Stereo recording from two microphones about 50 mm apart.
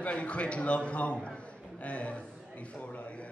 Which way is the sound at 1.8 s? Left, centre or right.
Left.